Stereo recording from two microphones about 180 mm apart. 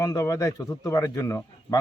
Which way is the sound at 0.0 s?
20° left (ahead or behind).